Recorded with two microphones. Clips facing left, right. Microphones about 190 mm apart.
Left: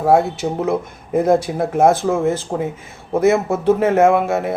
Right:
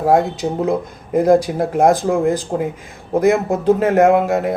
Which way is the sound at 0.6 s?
15° right (ahead or behind).